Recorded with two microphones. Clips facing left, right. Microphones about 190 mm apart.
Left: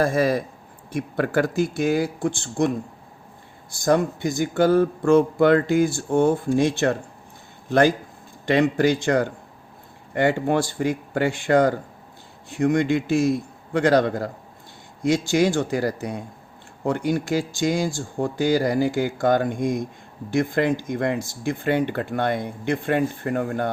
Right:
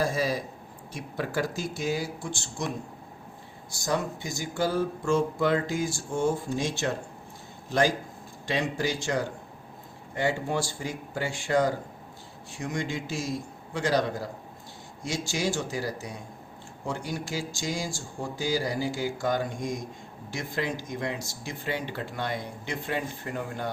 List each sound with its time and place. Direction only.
0.0 s speech: 55° left (ahead or behind)